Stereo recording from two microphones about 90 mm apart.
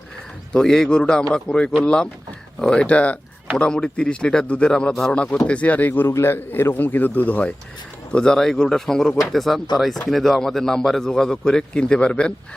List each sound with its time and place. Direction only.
0.5 s a man's voice: 5° left (ahead or behind)